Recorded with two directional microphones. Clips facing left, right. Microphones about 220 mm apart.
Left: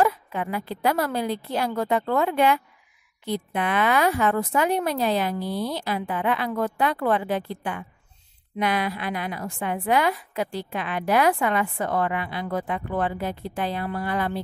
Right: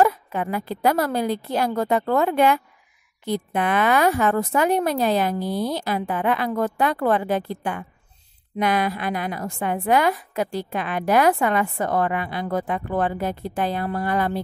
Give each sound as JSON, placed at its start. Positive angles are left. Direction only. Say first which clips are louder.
{"t": 0.0, "sound": "a woman's voice", "louder": "right 3 dB", "side_deg": -45}